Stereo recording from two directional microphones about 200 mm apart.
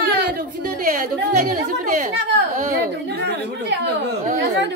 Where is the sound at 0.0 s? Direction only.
50° right (ahead or behind).